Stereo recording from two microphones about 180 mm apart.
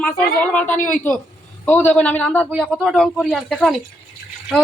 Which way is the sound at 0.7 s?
45° left (ahead or behind).